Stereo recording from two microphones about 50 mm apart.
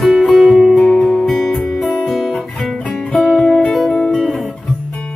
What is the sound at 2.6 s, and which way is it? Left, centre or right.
Music, left.